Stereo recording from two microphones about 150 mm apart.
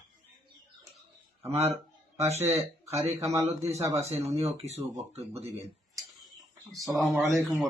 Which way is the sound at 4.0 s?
45° right (ahead or behind).